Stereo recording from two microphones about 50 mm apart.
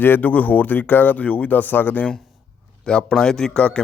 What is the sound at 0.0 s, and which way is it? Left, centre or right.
Speech, left.